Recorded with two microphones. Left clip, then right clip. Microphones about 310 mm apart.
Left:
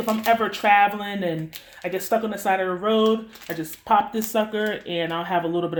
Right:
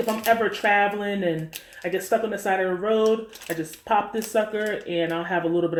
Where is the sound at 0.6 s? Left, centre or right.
Left.